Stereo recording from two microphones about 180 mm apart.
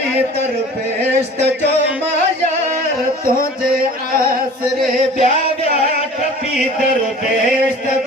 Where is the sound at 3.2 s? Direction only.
55° right (ahead or behind).